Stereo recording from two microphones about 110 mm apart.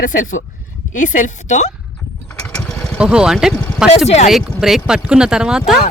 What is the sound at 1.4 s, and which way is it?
Speech, 90° left.